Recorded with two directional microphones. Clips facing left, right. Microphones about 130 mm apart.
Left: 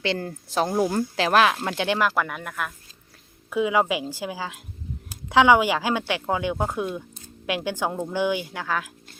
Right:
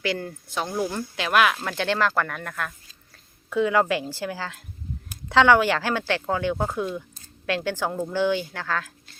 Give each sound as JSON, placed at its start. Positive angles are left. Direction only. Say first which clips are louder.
{"t": 0.0, "sound": "speech", "louder": "left 1 dB", "side_deg": 30}